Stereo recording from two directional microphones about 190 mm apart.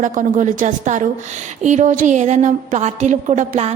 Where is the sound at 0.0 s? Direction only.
45° right (ahead or behind).